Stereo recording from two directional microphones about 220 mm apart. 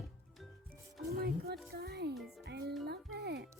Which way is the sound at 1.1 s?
45° right (ahead or behind).